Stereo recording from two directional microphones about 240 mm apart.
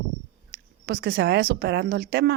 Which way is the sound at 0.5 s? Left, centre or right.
Right.